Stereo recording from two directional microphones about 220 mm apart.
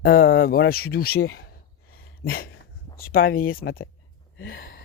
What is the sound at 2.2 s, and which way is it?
Speech, 45° left (ahead or behind).